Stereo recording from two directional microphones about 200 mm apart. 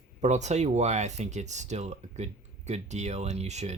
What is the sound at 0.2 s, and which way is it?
Speech, 35° right (ahead or behind).